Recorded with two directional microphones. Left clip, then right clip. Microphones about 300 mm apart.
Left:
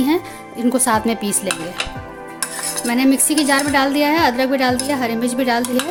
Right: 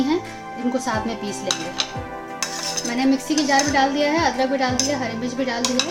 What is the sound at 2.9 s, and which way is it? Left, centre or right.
A woman's voice, left.